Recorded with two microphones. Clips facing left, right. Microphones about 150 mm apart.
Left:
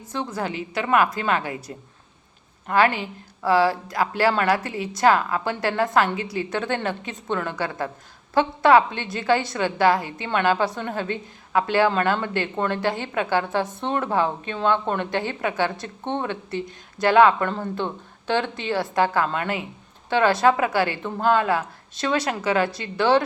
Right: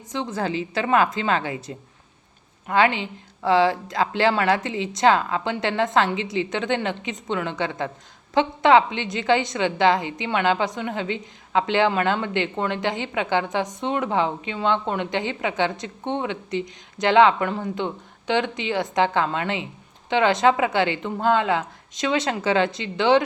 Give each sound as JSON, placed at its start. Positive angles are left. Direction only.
{"t": 0.1, "sound": "a woman's voice", "side_deg": -20}